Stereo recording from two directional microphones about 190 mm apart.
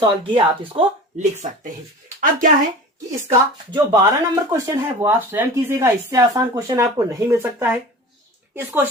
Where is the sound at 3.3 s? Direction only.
20° right (ahead or behind).